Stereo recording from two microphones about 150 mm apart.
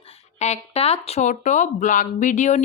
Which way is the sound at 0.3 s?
50° left (ahead or behind).